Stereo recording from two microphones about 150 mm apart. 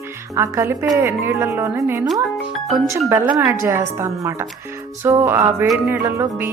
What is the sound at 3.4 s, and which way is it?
Speech, 15° right (ahead or behind).